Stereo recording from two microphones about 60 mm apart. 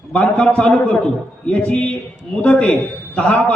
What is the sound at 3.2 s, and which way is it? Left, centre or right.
Speech, left.